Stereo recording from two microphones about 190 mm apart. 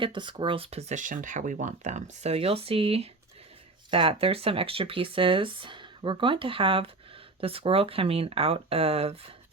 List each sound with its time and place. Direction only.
0.0 s speech: 25° right (ahead or behind)